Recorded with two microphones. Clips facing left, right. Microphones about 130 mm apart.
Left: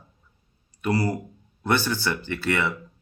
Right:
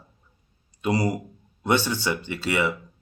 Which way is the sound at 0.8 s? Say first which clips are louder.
Right 1 dB; 20° right (ahead or behind).